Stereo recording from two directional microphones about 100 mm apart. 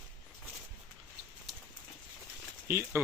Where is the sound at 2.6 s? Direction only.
25° right (ahead or behind).